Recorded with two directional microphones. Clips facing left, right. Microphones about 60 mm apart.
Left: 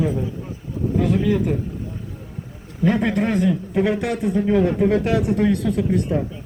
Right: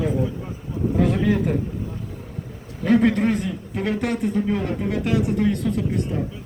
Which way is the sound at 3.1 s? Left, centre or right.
Left.